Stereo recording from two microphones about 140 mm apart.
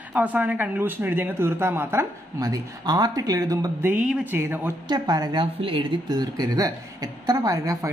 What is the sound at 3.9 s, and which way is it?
Speech, 10° right (ahead or behind).